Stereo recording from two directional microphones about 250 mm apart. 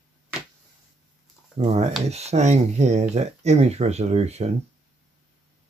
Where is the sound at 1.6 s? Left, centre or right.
Right.